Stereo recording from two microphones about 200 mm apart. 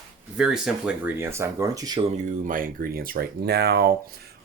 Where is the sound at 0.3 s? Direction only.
5° right (ahead or behind).